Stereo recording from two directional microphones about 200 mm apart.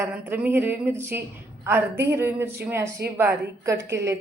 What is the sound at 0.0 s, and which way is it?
Speech, 10° right (ahead or behind).